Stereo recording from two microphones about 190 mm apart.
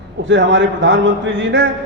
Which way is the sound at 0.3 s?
75° right (ahead or behind).